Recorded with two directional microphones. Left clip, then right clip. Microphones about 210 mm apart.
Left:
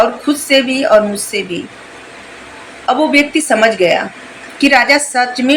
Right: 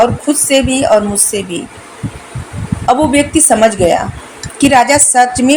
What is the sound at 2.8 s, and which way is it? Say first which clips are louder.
Speech: right 1 dB; 40° right (ahead or behind).